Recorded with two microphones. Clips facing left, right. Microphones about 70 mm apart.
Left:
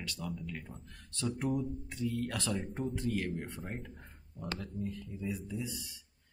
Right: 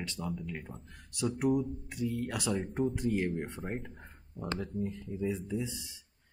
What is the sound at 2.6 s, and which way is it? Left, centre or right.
Speech, centre.